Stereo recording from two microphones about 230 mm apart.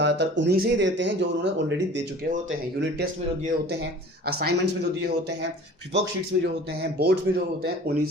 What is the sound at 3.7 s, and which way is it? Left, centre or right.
Speech, right.